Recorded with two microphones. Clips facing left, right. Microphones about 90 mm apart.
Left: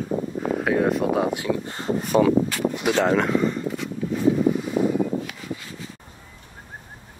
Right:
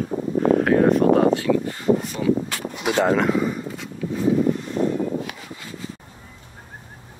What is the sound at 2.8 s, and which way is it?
Speech, 5° right (ahead or behind).